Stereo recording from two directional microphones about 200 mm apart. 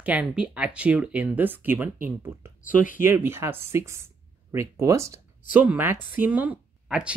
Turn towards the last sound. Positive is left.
turn(degrees=-5)  # may be behind; listen again after turning